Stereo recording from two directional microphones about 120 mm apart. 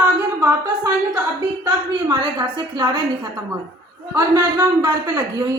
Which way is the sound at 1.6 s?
35° right (ahead or behind).